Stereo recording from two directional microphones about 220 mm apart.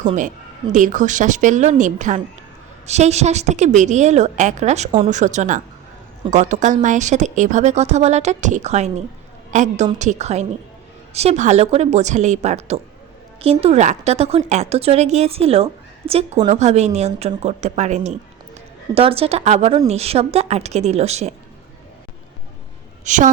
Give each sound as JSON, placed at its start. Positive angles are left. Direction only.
{"t": 0.7, "sound": "a woman's voice", "side_deg": -35}
{"t": 23.0, "sound": "a woman's voice", "side_deg": -35}